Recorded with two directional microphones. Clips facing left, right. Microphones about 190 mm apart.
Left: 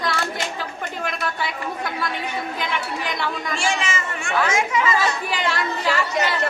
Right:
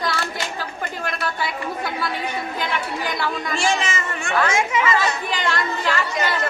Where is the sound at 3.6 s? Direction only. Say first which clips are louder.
Right 2 dB; 40° right (ahead or behind).